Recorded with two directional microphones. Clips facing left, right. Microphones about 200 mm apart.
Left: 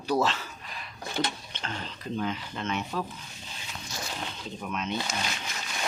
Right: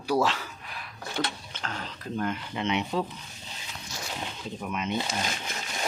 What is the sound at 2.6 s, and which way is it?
Speech, 15° right (ahead or behind).